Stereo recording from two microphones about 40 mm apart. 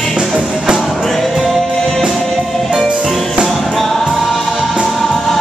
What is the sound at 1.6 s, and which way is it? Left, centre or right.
Music, centre.